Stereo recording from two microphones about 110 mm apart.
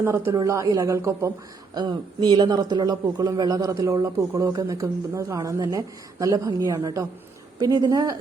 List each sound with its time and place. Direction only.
0.3 s a woman's voice: 30° right (ahead or behind)
1.7 s a woman's voice: 40° right (ahead or behind)